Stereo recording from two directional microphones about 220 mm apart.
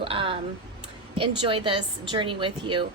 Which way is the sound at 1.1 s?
25° right (ahead or behind).